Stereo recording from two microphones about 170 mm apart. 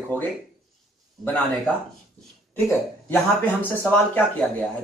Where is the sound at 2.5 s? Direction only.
15° left (ahead or behind).